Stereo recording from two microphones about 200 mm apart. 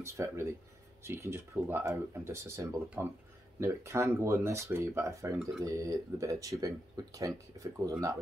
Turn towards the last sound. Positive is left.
turn(degrees=-15)  # may be behind; listen again after turning